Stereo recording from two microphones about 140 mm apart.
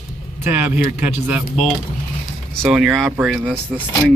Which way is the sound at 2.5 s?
Centre (ahead or behind).